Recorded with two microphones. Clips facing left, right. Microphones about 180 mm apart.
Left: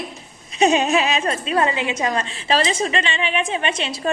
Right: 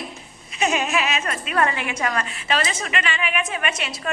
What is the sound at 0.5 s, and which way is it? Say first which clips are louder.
A woman's voice: left 6 dB; 30° left (ahead or behind).